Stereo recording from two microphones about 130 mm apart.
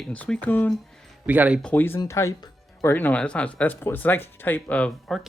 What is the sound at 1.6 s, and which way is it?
Speech, 15° left (ahead or behind).